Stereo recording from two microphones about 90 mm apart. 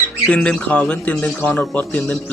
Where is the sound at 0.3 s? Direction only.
10° left (ahead or behind).